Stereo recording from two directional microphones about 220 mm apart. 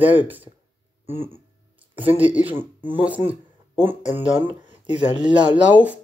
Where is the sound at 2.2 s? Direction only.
5° right (ahead or behind).